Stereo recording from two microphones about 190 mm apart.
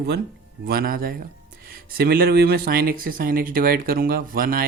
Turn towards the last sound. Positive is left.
turn(degrees=-50)  # may be behind; listen again after turning